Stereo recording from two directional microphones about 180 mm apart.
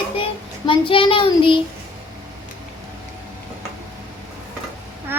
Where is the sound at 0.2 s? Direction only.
30° left (ahead or behind).